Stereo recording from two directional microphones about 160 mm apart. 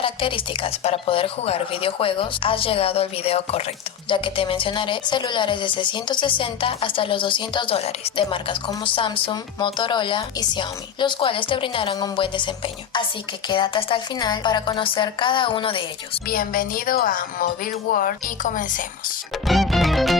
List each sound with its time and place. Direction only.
0.0 s a woman's voice: 35° left (ahead or behind)
13.5 s speech: 30° left (ahead or behind)
16.3 s a woman's voice: 65° left (ahead or behind)
19.5 s music: centre (ahead or behind)